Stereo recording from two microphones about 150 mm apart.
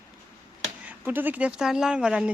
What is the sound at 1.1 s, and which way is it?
Speech, 10° right (ahead or behind).